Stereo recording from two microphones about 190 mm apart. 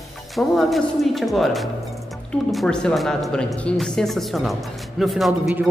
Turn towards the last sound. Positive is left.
turn(degrees=0)  # may be behind; listen again after turning